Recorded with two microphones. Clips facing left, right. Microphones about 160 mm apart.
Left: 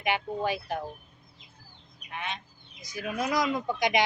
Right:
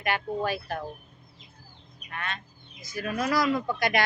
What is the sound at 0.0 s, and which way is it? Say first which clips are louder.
Speech: even; 15° left (ahead or behind).